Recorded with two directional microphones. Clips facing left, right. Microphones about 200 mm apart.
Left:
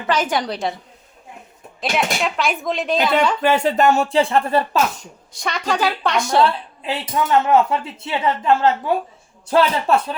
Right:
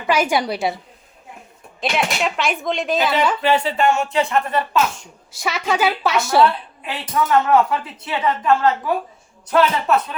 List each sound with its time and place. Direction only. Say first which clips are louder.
0.1 s a woman's voice: right 2 dB; 10° right (ahead or behind)
1.8 s speech: even; centre (ahead or behind)
3.4 s speech: left 2 dB; 45° left (ahead or behind)
5.3 s speech: right 1 dB; 5° right (ahead or behind)
6.8 s speech: even; 25° left (ahead or behind)